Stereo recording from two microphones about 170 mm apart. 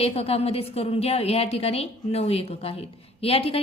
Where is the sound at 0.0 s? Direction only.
35° left (ahead or behind).